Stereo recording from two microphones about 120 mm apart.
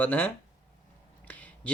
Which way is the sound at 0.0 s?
15° left (ahead or behind).